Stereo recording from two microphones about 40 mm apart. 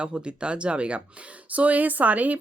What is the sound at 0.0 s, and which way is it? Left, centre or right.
Speech, right.